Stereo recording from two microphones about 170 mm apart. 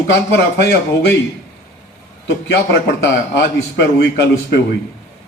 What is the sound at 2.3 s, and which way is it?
Speech, 90° left.